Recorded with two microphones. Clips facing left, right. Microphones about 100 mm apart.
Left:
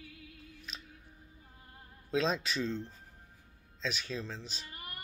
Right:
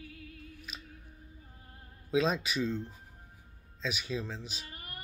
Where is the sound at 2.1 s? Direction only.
5° right (ahead or behind).